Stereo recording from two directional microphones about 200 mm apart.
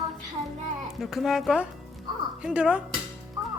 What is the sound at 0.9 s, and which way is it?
A woman's voice, centre (ahead or behind).